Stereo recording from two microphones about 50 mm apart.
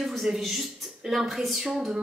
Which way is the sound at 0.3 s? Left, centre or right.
Centre.